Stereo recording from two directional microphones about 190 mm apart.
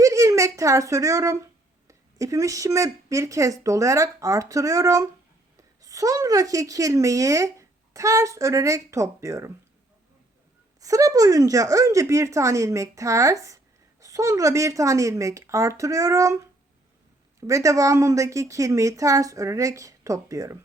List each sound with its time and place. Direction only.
0.0 s a woman's voice: 15° right (ahead or behind)
10.8 s a woman's voice: 15° right (ahead or behind)